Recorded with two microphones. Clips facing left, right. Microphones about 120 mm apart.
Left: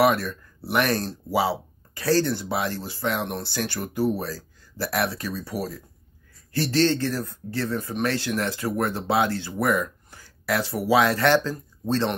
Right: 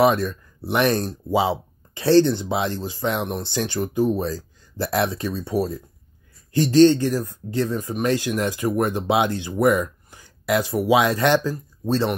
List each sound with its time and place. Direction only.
0.0 s speech: 20° right (ahead or behind)
6.5 s speech: 15° right (ahead or behind)